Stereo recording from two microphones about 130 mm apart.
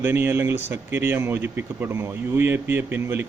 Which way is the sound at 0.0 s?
15° right (ahead or behind).